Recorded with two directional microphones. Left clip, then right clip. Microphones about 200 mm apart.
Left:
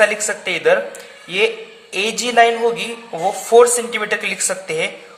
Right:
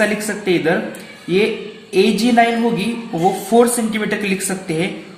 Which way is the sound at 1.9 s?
40° left (ahead or behind).